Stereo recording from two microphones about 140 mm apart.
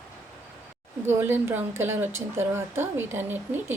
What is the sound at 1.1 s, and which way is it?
A woman's voice, 15° right (ahead or behind).